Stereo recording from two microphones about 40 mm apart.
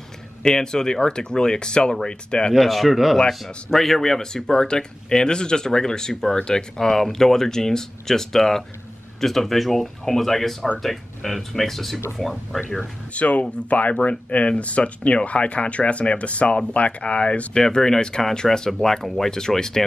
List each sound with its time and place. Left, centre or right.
0.4 s speech: centre
2.5 s speech: centre
13.1 s speech: left
17.6 s speech: centre